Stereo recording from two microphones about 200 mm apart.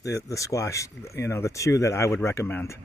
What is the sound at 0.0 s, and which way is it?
Speech, 15° left (ahead or behind).